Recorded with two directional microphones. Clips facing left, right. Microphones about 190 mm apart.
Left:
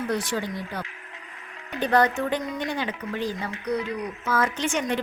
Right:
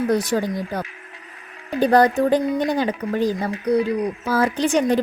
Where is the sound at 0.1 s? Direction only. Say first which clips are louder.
Right 7 dB; 40° right (ahead or behind).